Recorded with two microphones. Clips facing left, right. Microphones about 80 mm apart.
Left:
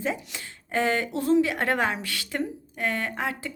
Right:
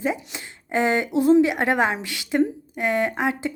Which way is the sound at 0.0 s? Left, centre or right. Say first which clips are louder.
Right 4 dB; centre.